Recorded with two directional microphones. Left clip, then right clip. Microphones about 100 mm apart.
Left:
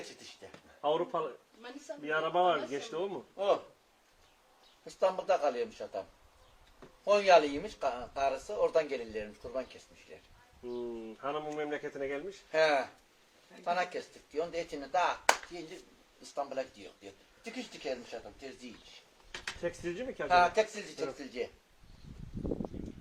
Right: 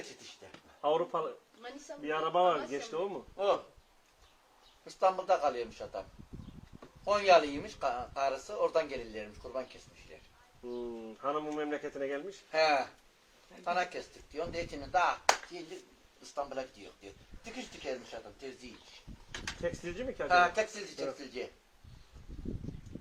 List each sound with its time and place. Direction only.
0.8 s speech: 20° left (ahead or behind)
2.3 s speech: 5° left (ahead or behind)
2.9 s speech: 15° left (ahead or behind)
3.3 s speech: centre (ahead or behind)
4.9 s speech: centre (ahead or behind); by 12.2 s 25° left (ahead or behind)
12.5 s speech: centre (ahead or behind)
19.6 s speech: 15° left (ahead or behind)
20.2 s speech: centre (ahead or behind)